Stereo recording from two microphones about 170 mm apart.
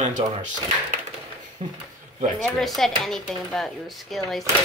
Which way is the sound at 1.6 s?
30° right (ahead or behind).